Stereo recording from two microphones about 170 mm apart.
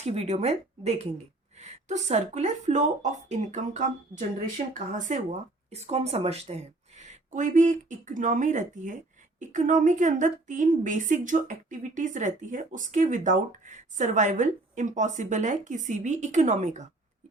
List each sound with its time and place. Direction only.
0.0 s a woman's voice: 40° right (ahead or behind)